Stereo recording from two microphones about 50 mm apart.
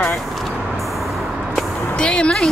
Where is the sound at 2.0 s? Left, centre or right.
Centre.